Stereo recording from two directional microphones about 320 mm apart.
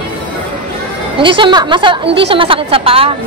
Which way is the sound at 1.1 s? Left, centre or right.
Centre.